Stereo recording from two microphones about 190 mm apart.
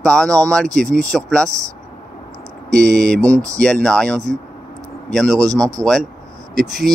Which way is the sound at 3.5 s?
5° left (ahead or behind).